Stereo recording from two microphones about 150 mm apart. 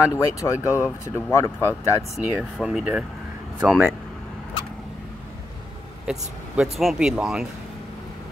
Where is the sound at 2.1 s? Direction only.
5° right (ahead or behind).